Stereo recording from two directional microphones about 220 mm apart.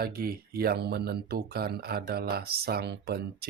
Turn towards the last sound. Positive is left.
turn(degrees=-45)  # may be behind; listen again after turning